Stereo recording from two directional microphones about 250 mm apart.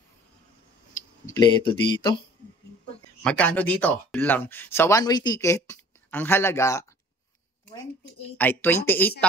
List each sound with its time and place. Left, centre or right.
1.3 s speech: centre
3.2 s speech: centre
8.4 s speech: centre